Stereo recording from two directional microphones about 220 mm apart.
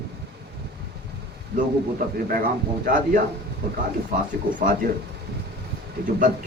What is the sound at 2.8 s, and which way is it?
Speech, 40° right (ahead or behind).